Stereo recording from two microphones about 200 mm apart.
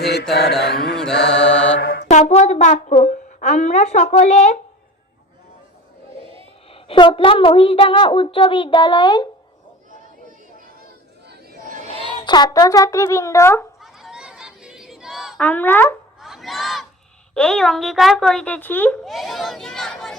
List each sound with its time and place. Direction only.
0.0 s mantra: 55° left (ahead or behind)
1.3 s mantra: 5° left (ahead or behind)
1.8 s mantra: 50° left (ahead or behind)
2.0 s a woman's voice: 35° left (ahead or behind)
6.7 s a child's voice: 25° left (ahead or behind)
11.9 s speech: 25° left (ahead or behind)
13.8 s a sound: centre (ahead or behind)
16.2 s battle cry: centre (ahead or behind)
17.3 s a woman's voice: 5° left (ahead or behind)